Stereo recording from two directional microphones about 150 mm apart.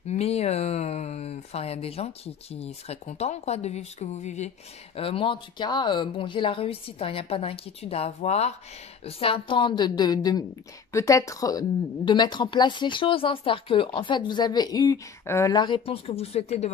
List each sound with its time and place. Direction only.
0.1 s speech: 45° left (ahead or behind)
4.9 s a woman's voice: 40° left (ahead or behind)